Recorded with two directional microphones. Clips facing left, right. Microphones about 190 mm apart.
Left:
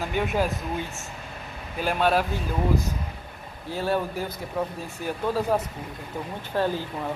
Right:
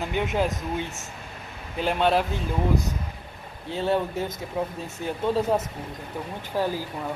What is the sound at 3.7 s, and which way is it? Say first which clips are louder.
Speech: right 1 dB; 25° right (ahead or behind).